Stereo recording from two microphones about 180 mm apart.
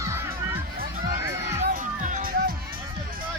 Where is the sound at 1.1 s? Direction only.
45° right (ahead or behind).